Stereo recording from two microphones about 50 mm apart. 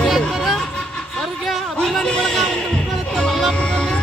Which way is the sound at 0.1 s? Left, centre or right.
Centre.